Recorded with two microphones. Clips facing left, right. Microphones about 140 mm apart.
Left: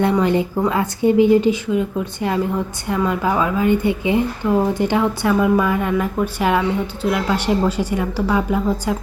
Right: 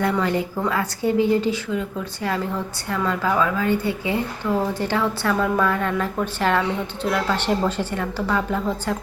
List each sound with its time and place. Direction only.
0.0 s speech: 20° left (ahead or behind)
2.8 s a woman's voice: 15° left (ahead or behind)